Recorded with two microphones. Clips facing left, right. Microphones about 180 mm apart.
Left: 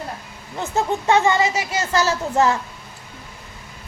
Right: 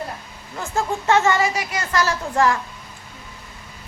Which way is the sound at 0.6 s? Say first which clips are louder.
Left 2 dB; 20° left (ahead or behind).